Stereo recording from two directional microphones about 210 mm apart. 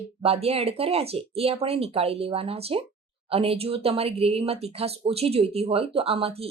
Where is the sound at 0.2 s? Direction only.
30° right (ahead or behind).